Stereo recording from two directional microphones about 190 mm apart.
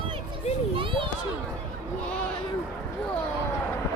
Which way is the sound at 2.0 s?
5° left (ahead or behind).